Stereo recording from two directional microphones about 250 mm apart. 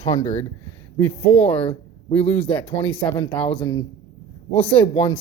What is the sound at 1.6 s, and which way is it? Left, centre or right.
Speech, left.